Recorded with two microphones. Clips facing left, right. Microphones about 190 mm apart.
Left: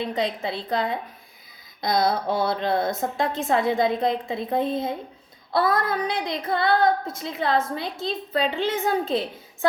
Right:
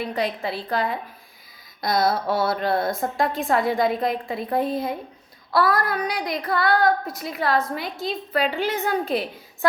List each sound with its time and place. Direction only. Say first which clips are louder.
0.0 s child singing: even; 20° left (ahead or behind)